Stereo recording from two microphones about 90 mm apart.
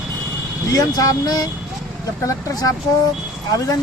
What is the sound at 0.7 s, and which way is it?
Speech, 45° left (ahead or behind).